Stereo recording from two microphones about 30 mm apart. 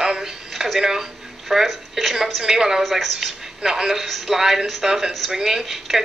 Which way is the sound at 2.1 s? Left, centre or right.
Centre.